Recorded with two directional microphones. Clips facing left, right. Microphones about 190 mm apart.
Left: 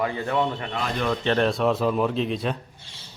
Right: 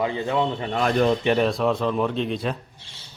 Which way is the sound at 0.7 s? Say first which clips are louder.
Right 7 dB; 50° right (ahead or behind).